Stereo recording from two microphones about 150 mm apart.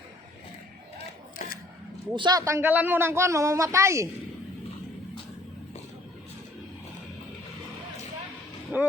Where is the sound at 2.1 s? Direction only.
30° right (ahead or behind).